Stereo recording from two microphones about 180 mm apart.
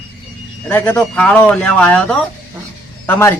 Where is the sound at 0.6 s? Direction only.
5° left (ahead or behind).